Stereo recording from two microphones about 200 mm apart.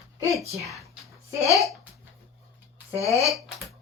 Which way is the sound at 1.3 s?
15° right (ahead or behind).